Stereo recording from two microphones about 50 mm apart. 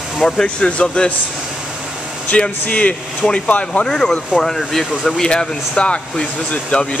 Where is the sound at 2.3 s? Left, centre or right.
Left.